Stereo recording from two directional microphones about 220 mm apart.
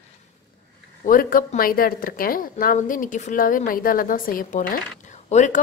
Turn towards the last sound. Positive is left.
turn(degrees=30)  # may be behind; listen again after turning